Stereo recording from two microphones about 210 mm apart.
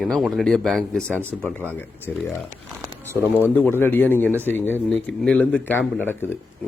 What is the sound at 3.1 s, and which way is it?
Speech, 10° left (ahead or behind).